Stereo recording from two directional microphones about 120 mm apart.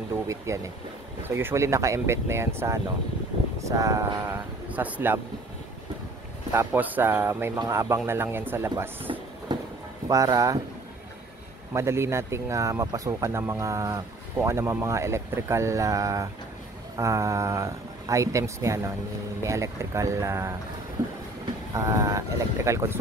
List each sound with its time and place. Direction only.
0.5 s speech: 25° right (ahead or behind)
6.5 s speech: 20° right (ahead or behind)
7.5 s speech: 30° right (ahead or behind)
9.5 s a sound: 35° right (ahead or behind)
10.0 s speech: 30° right (ahead or behind)
11.7 s speech: 20° right (ahead or behind)
21.7 s speech: 25° right (ahead or behind)